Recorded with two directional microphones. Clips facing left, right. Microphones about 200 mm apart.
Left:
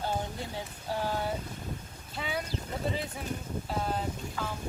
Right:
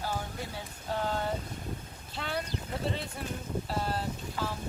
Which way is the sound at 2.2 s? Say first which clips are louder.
Even; 5° left (ahead or behind).